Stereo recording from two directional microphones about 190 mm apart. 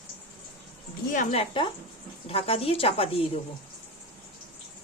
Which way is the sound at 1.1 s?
35° left (ahead or behind).